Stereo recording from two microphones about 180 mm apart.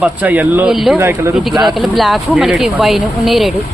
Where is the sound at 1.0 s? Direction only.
15° right (ahead or behind).